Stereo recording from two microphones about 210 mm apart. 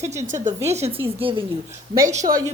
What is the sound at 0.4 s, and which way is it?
A woman's voice, 30° right (ahead or behind).